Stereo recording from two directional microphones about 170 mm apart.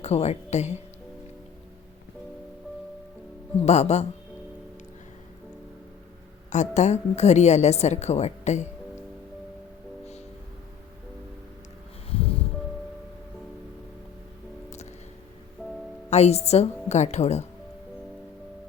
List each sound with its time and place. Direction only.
0.0 s a woman's voice: 40° left (ahead or behind)
3.6 s a woman's voice: 40° left (ahead or behind)
6.5 s a woman's voice: 45° left (ahead or behind)
12.1 s music: 35° left (ahead or behind)
15.6 s music: 5° right (ahead or behind)
16.0 s a woman's voice: 40° left (ahead or behind)